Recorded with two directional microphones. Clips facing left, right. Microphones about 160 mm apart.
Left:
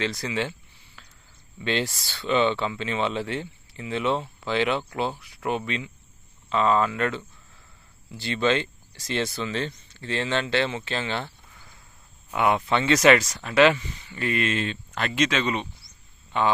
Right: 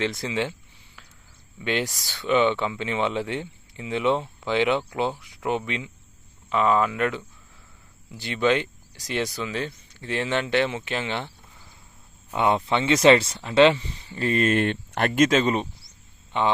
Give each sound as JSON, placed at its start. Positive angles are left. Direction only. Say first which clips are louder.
{"t": 0.0, "sound": "speech", "louder": "right 1 dB", "side_deg": -20}
{"t": 1.6, "sound": "speech", "louder": "even", "side_deg": -15}
{"t": 12.4, "sound": "speech", "louder": "even", "side_deg": -25}
{"t": 14.5, "sound": "speech", "louder": "right 6 dB", "side_deg": -60}
{"t": 16.3, "sound": "speech", "louder": "even", "side_deg": -20}